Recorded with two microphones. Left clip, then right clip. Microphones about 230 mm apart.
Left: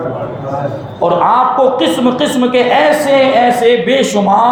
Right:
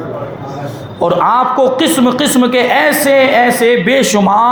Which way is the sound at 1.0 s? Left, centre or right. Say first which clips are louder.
Left 1 dB; right.